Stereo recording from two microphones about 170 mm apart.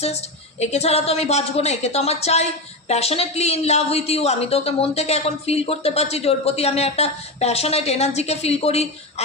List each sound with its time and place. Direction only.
0.0 s a woman's voice: 40° left (ahead or behind)